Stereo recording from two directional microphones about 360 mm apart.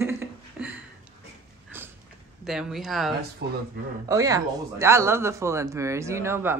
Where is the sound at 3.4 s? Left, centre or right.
Right.